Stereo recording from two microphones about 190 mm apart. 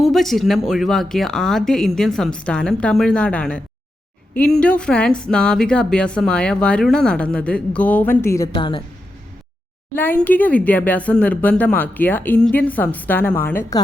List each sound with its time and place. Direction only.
0.0 s speech: centre (ahead or behind)
8.5 s a woman's voice: 25° left (ahead or behind)
9.9 s speech: 10° left (ahead or behind)